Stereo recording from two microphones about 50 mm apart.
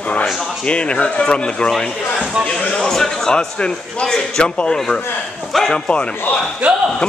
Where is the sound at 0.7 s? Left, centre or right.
Left.